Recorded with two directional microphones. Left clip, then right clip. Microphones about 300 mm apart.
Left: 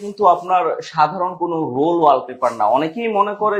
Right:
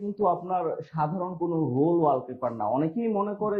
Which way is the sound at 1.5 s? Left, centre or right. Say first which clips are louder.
Left 5 dB; left.